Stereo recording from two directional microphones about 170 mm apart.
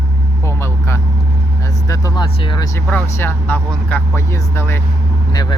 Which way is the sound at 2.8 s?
10° left (ahead or behind).